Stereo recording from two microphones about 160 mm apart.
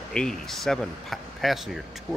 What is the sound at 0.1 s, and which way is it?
Speech, 5° left (ahead or behind).